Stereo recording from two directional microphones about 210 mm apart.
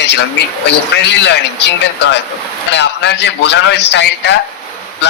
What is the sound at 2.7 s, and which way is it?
A man's voice, 55° left (ahead or behind).